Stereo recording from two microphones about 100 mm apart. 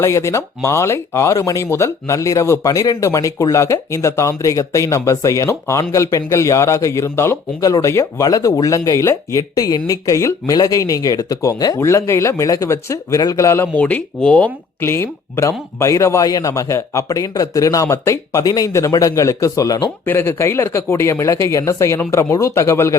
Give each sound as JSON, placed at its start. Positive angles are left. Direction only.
{"t": 0.0, "sound": "speech", "side_deg": 30}
{"t": 11.8, "sound": "speech", "side_deg": 30}
{"t": 13.7, "sound": "speech", "side_deg": 15}
{"t": 14.8, "sound": "speech", "side_deg": 25}
{"t": 20.1, "sound": "speech", "side_deg": 25}